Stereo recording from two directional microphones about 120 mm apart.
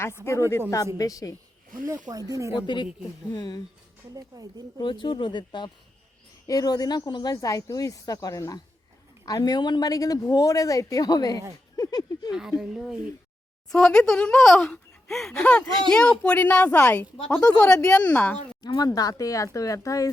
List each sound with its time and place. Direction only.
0.3 s speech: 25° left (ahead or behind)
2.0 s speech: 30° right (ahead or behind)
2.7 s a woman's voice: 40° left (ahead or behind)
4.8 s a woman's voice: 40° left (ahead or behind)
12.3 s a child's voice: 5° right (ahead or behind); by 18.3 s 10° left (ahead or behind)
18.6 s a woman's voice: 35° left (ahead or behind)